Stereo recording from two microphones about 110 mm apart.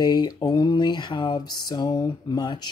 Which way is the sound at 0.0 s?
40° left (ahead or behind).